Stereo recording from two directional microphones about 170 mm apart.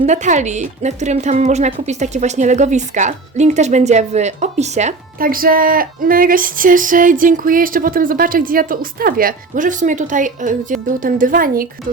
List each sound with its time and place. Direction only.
0.0 s a woman's voice: 45° right (ahead or behind)
5.2 s female singing: 55° right (ahead or behind)